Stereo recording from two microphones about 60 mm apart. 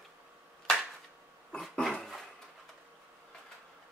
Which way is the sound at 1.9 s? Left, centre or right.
Centre.